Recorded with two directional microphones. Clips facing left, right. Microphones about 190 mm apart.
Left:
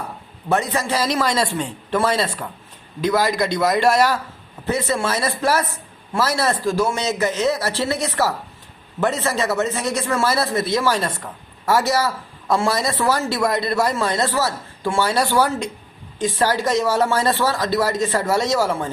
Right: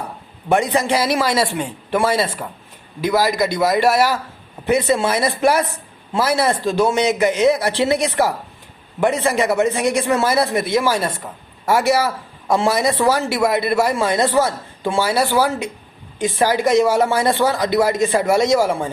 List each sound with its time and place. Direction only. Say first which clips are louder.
0.4 s speech: right 4 dB; 15° right (ahead or behind)